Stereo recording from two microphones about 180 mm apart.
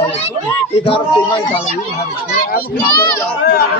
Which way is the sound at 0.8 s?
30° left (ahead or behind).